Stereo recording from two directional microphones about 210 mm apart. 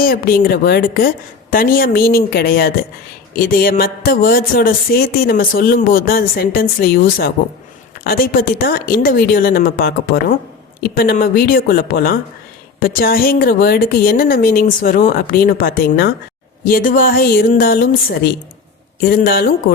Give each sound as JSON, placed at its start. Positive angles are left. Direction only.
{"t": 0.0, "sound": "speech", "side_deg": 45}